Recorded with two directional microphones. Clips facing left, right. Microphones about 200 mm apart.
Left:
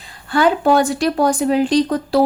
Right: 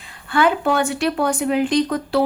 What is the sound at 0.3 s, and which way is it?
A woman's voice, 35° left (ahead or behind).